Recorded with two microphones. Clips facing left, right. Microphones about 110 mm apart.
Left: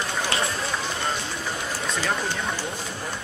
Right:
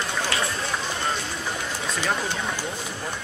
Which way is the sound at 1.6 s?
5° left (ahead or behind).